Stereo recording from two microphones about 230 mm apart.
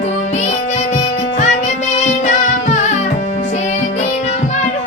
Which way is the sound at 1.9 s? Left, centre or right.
Left.